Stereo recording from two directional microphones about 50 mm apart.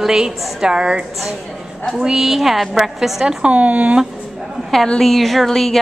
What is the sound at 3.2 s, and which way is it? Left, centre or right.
Speech, right.